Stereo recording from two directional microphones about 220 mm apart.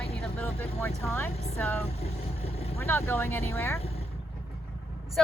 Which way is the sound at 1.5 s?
10° left (ahead or behind).